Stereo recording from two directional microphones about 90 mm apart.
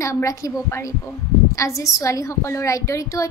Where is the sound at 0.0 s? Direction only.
35° left (ahead or behind).